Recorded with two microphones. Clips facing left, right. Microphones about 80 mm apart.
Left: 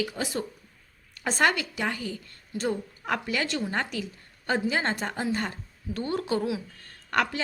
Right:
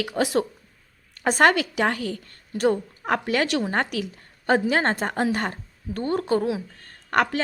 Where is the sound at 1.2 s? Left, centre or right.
Right.